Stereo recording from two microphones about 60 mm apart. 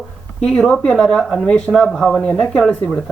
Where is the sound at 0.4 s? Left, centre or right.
Centre.